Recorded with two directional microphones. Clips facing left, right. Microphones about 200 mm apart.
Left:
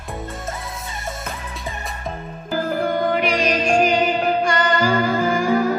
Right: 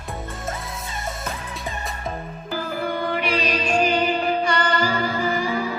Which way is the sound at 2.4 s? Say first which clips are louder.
Left 5 dB; 50° left (ahead or behind).